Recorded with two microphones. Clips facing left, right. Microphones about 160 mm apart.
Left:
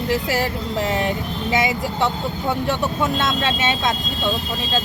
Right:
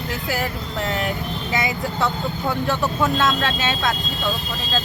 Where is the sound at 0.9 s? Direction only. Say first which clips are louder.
Left 2 dB; 20° left (ahead or behind).